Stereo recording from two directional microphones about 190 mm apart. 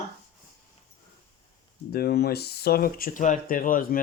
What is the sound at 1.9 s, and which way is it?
Speech, 55° left (ahead or behind).